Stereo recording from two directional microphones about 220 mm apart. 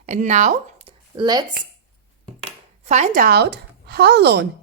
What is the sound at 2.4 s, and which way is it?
A woman's voice, 30° right (ahead or behind).